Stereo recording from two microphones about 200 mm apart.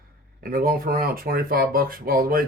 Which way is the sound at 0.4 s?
45° right (ahead or behind).